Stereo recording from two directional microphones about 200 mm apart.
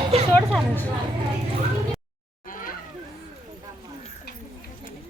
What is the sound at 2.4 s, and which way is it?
Cat, 40° left (ahead or behind).